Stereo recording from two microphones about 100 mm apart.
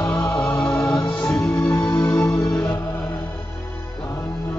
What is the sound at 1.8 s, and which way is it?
Music, 20° left (ahead or behind).